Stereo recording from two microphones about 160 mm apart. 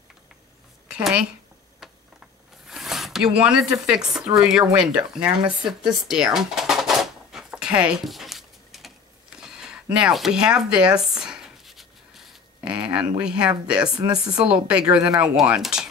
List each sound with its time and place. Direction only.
0.8 s a sound: 5° right (ahead or behind)
2.7 s speech: centre (ahead or behind)
4.4 s a sound: 5° right (ahead or behind)
13.2 s speech: 5° right (ahead or behind)
13.9 s speech: 25° right (ahead or behind)
14.4 s speech: 5° right (ahead or behind)